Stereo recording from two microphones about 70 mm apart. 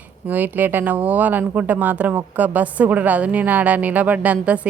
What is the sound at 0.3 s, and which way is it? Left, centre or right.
Speech, right.